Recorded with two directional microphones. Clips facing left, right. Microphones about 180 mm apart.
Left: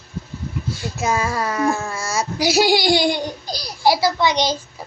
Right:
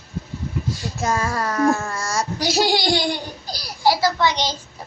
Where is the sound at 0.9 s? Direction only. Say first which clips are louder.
Left 2 dB; 5° left (ahead or behind).